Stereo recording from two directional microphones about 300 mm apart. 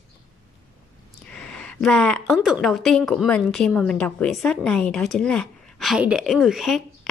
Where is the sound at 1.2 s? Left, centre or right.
Centre.